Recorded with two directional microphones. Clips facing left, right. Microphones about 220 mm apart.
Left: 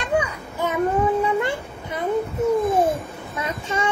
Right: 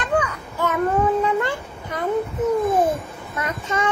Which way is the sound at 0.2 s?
10° left (ahead or behind).